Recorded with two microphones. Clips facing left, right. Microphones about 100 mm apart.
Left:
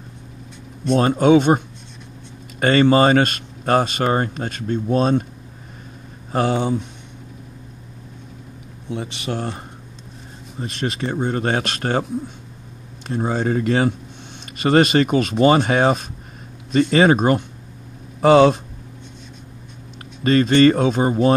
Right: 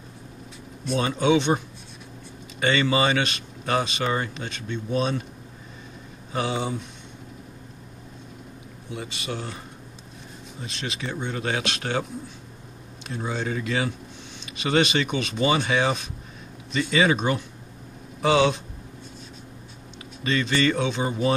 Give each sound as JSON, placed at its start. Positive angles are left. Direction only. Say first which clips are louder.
{"t": 0.9, "sound": "speech", "louder": "left 7 dB", "side_deg": 50}
{"t": 2.6, "sound": "speech", "louder": "left 8 dB", "side_deg": 50}
{"t": 6.3, "sound": "speech", "louder": "left 7 dB", "side_deg": 55}
{"t": 9.3, "sound": "speech", "louder": "left 7 dB", "side_deg": 55}
{"t": 10.6, "sound": "speech", "louder": "left 8 dB", "side_deg": 45}
{"t": 13.0, "sound": "speech", "louder": "left 8 dB", "side_deg": 45}
{"t": 20.2, "sound": "speech", "louder": "left 10 dB", "side_deg": 45}